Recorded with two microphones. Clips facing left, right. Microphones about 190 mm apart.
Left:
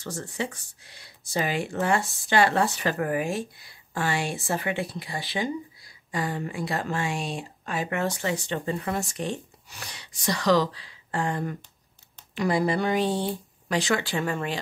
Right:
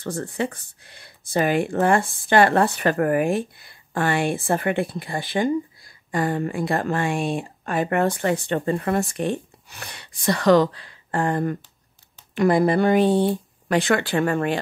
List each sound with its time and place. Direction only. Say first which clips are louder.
0.0 s speech: right 6 dB; 55° right (ahead or behind)